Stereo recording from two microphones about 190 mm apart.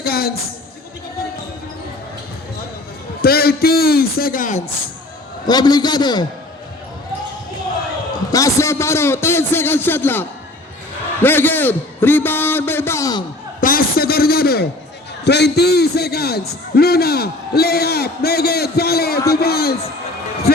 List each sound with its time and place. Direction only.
0.0 s a sound: 55° left (ahead or behind)
3.2 s a man's voice: 55° left (ahead or behind)
5.5 s a man's voice: 20° left (ahead or behind)
8.3 s a man's voice: 15° left (ahead or behind)
13.6 s a sound: 50° left (ahead or behind)
15.2 s a man's voice: 60° left (ahead or behind)